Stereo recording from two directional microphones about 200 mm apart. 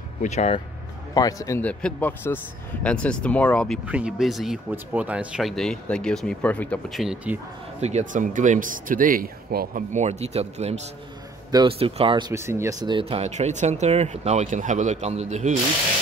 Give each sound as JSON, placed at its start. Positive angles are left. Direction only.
{"t": 0.2, "sound": "speech", "side_deg": 35}
{"t": 1.1, "sound": "speech", "side_deg": 15}
{"t": 7.8, "sound": "speech", "side_deg": -35}